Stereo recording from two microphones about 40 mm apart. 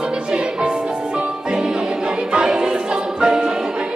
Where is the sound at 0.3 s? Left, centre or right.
Right.